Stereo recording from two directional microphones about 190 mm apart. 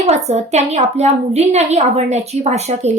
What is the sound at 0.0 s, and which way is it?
A woman's voice, 35° right (ahead or behind).